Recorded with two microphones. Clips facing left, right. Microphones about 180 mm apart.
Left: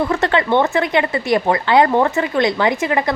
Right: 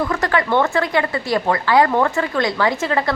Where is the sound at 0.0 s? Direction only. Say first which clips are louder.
Left 2 dB; 25° left (ahead or behind).